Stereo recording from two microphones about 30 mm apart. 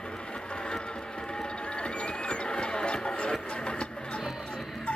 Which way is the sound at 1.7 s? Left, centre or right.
Left.